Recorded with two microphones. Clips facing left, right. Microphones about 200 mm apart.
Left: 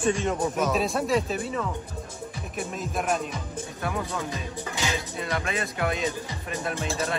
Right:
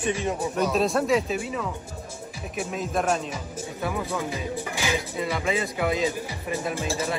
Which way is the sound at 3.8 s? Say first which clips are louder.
Right 2 dB; 15° right (ahead or behind).